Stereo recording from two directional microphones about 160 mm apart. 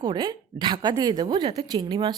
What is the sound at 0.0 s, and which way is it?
A woman's voice, 30° right (ahead or behind).